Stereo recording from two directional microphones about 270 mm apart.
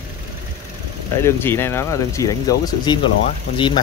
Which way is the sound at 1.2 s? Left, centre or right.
Centre.